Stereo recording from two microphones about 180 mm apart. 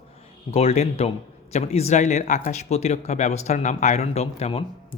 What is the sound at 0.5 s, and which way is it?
Speech, 35° left (ahead or behind).